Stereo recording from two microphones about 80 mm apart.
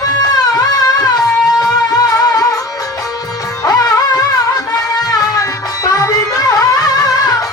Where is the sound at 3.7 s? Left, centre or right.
Left.